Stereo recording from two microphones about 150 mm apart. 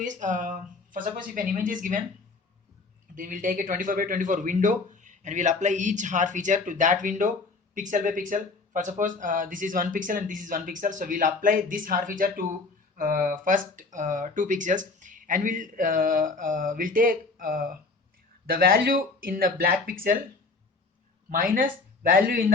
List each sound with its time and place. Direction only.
0.0 s speech: 55° right (ahead or behind)
3.2 s speech: 65° right (ahead or behind)
18.4 s speech: 85° right
21.2 s speech: 65° right (ahead or behind)